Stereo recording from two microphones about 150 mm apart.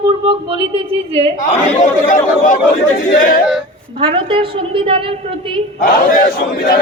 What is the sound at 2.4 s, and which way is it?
Speech, 65° left (ahead or behind).